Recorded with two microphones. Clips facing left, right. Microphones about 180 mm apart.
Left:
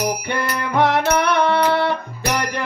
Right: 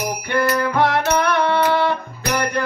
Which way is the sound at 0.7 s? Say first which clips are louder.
Left 5 dB; 20° left (ahead or behind).